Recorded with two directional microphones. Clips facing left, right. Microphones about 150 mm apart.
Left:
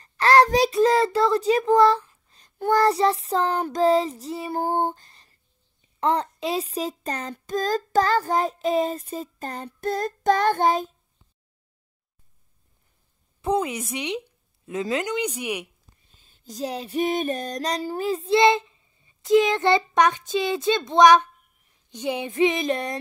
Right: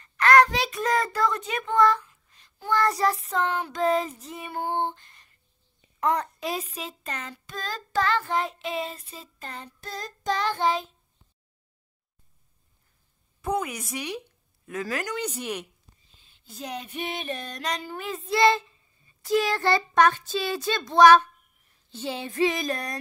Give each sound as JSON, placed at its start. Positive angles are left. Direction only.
{"t": 0.0, "sound": "child singing", "side_deg": 30}
{"t": 2.8, "sound": "speech", "side_deg": 25}
{"t": 9.7, "sound": "child singing", "side_deg": 55}
{"t": 13.4, "sound": "female singing", "side_deg": 25}
{"t": 14.7, "sound": "speech", "side_deg": 20}
{"t": 16.2, "sound": "female singing", "side_deg": 45}